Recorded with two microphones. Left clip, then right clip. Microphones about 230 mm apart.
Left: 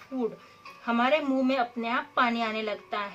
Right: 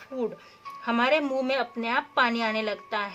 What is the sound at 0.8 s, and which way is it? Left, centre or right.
Speech, right.